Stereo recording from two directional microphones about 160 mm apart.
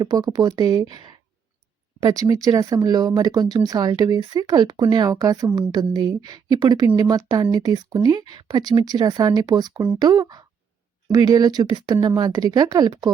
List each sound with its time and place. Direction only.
0.0 s speech: 25° right (ahead or behind)